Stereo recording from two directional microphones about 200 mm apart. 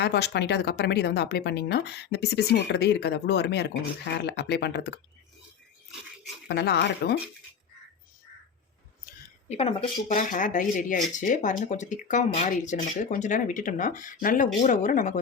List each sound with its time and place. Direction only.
0.0 s speech: 55° left (ahead or behind)
6.5 s speech: 55° left (ahead or behind)
9.5 s speech: 30° left (ahead or behind)